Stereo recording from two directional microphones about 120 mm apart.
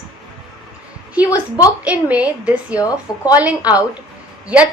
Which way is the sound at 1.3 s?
30° left (ahead or behind).